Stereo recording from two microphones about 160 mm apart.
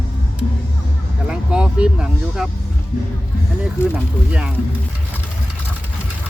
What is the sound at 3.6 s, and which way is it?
Speech, 5° right (ahead or behind).